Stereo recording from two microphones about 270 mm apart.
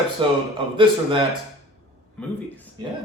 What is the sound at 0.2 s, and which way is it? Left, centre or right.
Speech, centre.